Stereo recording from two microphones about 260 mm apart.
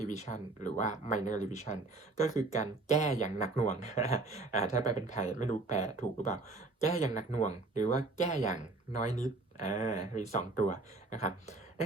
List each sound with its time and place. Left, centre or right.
0.0 s speech: left